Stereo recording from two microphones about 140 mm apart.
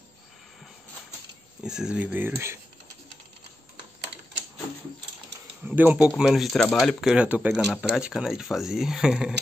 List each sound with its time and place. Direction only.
1.6 s speech: 5° right (ahead or behind)
5.7 s speech: 10° right (ahead or behind)